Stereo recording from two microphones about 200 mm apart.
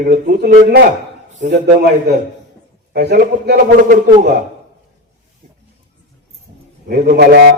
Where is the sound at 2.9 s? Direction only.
40° right (ahead or behind).